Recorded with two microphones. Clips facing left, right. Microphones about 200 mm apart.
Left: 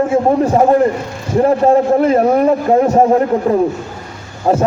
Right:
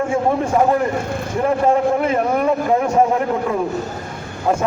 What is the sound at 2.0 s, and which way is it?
A man's voice, 35° left (ahead or behind).